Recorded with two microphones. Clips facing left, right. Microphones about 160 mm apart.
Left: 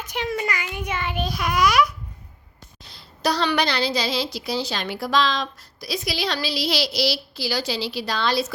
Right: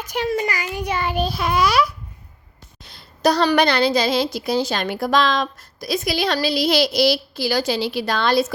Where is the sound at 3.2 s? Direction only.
45° right (ahead or behind).